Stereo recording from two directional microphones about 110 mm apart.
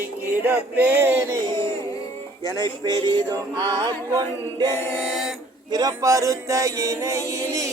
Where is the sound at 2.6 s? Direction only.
40° right (ahead or behind).